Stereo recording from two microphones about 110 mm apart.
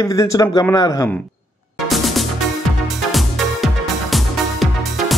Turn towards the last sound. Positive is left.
turn(degrees=0)  # may be behind; listen again after turning